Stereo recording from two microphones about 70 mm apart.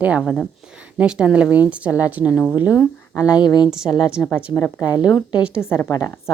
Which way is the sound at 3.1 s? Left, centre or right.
Left.